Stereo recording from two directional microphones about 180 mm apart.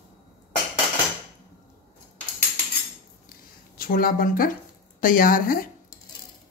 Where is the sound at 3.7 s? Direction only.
55° left (ahead or behind).